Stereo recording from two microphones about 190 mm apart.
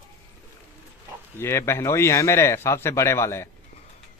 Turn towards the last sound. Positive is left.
turn(degrees=15)  # may be behind; listen again after turning